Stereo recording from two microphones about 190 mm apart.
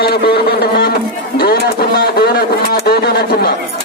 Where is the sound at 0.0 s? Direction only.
55° left (ahead or behind).